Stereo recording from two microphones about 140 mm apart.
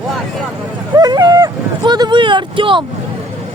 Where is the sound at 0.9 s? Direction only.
30° right (ahead or behind).